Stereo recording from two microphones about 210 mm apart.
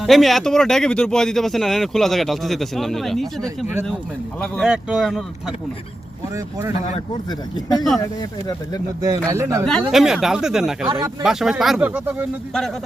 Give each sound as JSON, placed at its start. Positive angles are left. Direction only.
{"t": 0.0, "sound": "speech", "side_deg": 0}
{"t": 6.7, "sound": "speech", "side_deg": 30}
{"t": 9.0, "sound": "speech", "side_deg": -15}
{"t": 9.6, "sound": "speech", "side_deg": 0}